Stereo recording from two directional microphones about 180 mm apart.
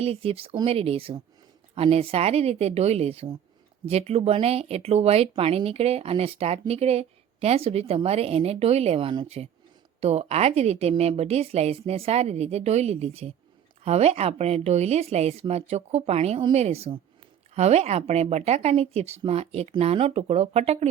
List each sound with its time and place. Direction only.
0.0 s speech: 30° right (ahead or behind)